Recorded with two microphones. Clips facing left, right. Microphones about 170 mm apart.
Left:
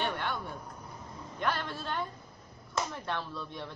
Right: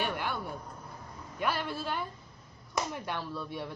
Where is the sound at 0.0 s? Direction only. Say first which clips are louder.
Even; 10° right (ahead or behind).